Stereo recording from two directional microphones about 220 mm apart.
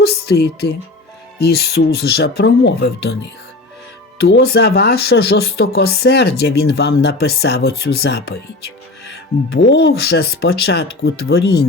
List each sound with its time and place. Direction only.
0.0 s speech: 45° left (ahead or behind)
4.2 s speech: 45° left (ahead or behind)
9.5 s speech: 55° left (ahead or behind)